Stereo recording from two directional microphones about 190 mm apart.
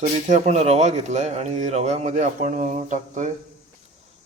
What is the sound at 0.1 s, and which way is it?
A man's voice, 35° right (ahead or behind).